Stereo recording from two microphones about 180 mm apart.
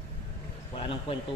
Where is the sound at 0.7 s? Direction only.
30° left (ahead or behind).